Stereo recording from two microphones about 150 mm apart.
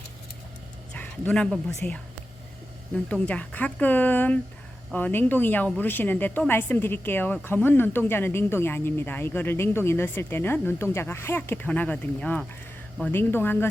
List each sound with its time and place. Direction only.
0.9 s speech: 10° left (ahead or behind)